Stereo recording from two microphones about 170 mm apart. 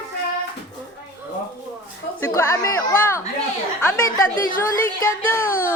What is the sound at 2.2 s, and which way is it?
A woman's voice, 15° left (ahead or behind).